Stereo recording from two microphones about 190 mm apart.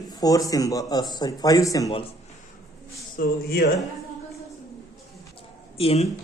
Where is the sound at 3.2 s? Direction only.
50° left (ahead or behind).